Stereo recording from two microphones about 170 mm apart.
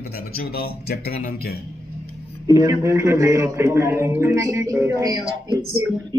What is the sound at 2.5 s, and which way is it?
A man's voice, 20° right (ahead or behind).